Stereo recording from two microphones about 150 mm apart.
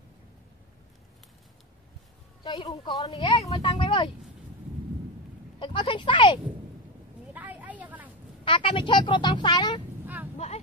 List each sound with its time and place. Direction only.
2.4 s a woman's voice: 30° left (ahead or behind)
3.1 s speech: 35° left (ahead or behind)
5.6 s speech: 35° left (ahead or behind)
7.3 s vehicle: 10° right (ahead or behind)
8.5 s speech: 35° left (ahead or behind)
10.3 s vehicle: 50° left (ahead or behind)